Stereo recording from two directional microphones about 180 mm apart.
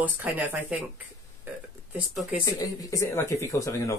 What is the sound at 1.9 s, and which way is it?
Speech, 10° right (ahead or behind).